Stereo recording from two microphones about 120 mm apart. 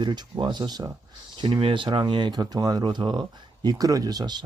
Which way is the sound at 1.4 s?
45° right (ahead or behind).